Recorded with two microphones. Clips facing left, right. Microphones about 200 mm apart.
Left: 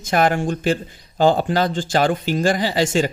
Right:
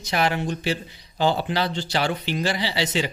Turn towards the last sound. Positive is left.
turn(degrees=45)  # may be behind; listen again after turning